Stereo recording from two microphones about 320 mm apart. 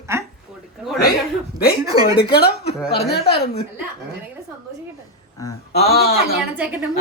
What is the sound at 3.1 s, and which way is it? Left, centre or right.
Speech, left.